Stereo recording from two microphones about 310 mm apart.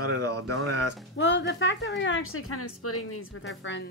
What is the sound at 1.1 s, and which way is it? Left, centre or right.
Speech, left.